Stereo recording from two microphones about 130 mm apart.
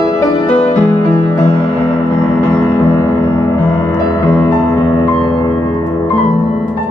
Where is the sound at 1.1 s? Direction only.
25° left (ahead or behind).